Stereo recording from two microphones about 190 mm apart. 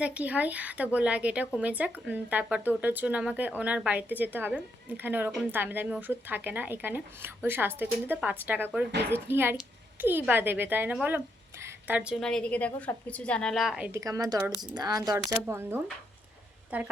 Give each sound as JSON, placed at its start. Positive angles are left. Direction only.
{"t": 0.0, "sound": "a woman's voice", "side_deg": -5}